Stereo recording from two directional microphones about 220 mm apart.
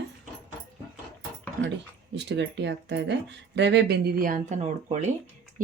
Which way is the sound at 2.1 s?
50° right (ahead or behind).